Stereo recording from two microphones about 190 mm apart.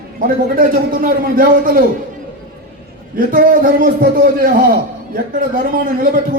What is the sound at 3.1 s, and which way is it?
A man's voice, 50° right (ahead or behind).